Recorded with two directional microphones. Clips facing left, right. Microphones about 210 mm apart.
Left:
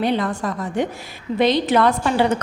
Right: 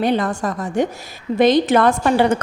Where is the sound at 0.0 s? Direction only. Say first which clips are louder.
Right 2 dB; 45° right (ahead or behind).